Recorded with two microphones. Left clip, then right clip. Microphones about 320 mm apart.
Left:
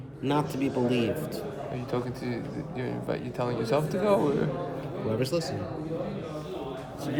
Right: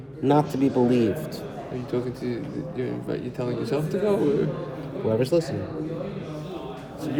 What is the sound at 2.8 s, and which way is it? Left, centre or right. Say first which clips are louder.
Speech: right 2 dB; centre.